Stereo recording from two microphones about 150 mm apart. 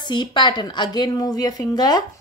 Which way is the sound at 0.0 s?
30° left (ahead or behind).